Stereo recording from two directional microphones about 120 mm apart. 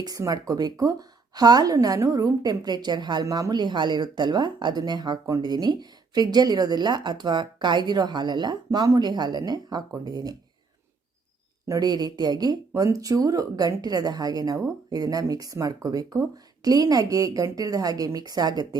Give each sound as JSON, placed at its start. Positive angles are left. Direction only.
{"t": 0.0, "sound": "speech", "side_deg": -30}
{"t": 11.7, "sound": "speech", "side_deg": -35}